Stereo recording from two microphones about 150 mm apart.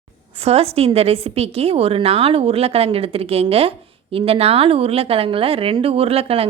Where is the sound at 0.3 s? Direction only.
40° right (ahead or behind).